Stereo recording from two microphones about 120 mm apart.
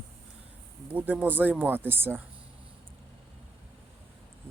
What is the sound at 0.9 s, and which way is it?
Speech, 15° right (ahead or behind).